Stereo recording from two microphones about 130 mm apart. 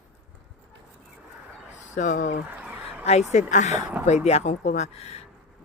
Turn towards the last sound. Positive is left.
turn(degrees=50)  # may be behind; listen again after turning